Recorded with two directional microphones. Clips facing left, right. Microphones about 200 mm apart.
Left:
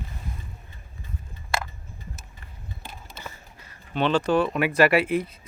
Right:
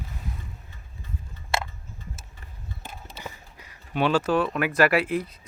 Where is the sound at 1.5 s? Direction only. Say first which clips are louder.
Right 1 dB; 25° right (ahead or behind).